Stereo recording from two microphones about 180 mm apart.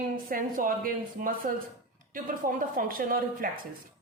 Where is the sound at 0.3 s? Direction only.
50° right (ahead or behind).